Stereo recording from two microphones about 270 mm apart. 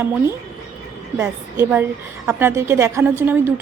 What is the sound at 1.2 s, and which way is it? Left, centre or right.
Speech, centre.